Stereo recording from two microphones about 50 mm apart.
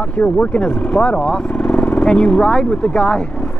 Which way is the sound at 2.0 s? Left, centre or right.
Centre.